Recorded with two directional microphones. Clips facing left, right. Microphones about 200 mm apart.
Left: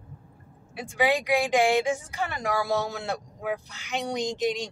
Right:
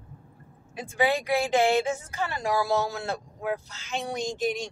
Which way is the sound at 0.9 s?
15° left (ahead or behind).